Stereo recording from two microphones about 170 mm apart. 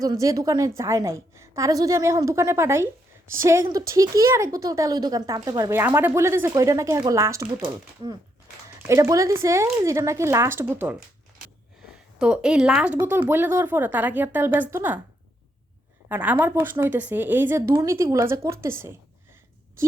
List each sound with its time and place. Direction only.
0.0 s a woman's voice: 20° right (ahead or behind)
8.9 s speech: 20° right (ahead or behind)
12.2 s speech: 5° right (ahead or behind)
16.0 s speech: 10° right (ahead or behind)